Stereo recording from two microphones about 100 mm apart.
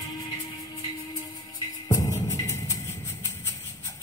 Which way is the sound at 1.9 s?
35° left (ahead or behind).